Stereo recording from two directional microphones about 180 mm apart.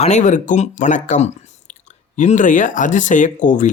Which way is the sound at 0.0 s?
40° left (ahead or behind).